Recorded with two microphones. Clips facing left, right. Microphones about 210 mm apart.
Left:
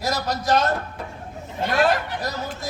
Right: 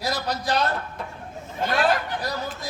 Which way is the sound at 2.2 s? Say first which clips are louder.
Left 1 dB; 45° left (ahead or behind).